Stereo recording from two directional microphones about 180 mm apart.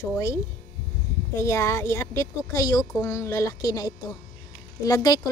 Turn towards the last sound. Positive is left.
turn(degrees=20)  # may be behind; listen again after turning